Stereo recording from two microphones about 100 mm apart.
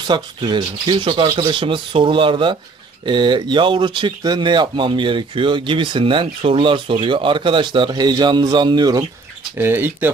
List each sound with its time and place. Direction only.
0.0 s speech: 50° right (ahead or behind)
9.6 s speech: 20° right (ahead or behind)